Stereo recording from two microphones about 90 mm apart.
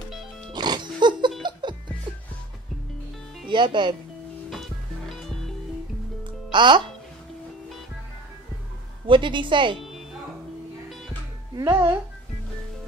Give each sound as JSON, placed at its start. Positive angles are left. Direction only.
{"t": 0.5, "sound": "music", "side_deg": -55}
{"t": 3.4, "sound": "speech", "side_deg": -60}
{"t": 4.5, "sound": "music", "side_deg": 5}
{"t": 6.2, "sound": "music", "side_deg": -60}
{"t": 9.0, "sound": "a woman's voice", "side_deg": -65}
{"t": 9.8, "sound": "music", "side_deg": 0}
{"t": 11.6, "sound": "speech", "side_deg": -30}